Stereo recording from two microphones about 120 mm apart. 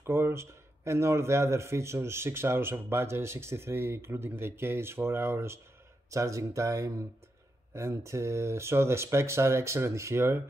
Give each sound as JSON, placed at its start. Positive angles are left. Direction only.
{"t": 0.0, "sound": "speech", "side_deg": -20}